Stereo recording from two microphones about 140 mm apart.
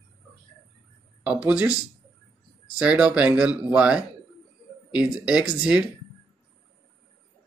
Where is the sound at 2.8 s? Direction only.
10° right (ahead or behind).